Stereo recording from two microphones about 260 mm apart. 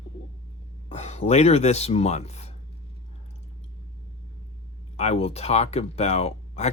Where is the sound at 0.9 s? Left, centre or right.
Left.